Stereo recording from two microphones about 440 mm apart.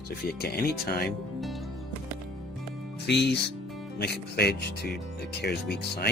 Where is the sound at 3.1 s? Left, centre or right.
Left.